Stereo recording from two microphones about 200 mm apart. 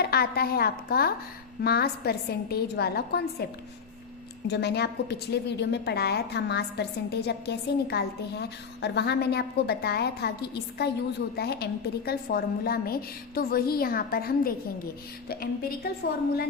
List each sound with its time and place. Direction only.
0.0 s a woman's voice: 50° left (ahead or behind)
4.4 s a woman's voice: 55° left (ahead or behind)